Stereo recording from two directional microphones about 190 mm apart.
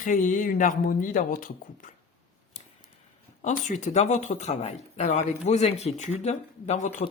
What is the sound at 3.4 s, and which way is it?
Speech, 40° left (ahead or behind).